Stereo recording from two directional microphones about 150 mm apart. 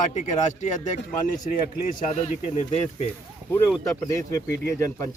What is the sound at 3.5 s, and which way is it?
Speech, 15° left (ahead or behind).